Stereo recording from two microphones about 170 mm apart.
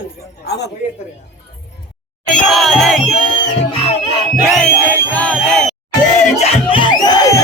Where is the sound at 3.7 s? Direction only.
30° left (ahead or behind).